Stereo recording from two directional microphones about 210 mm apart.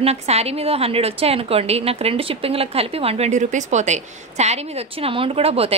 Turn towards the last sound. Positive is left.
turn(degrees=-30)  # may be behind; listen again after turning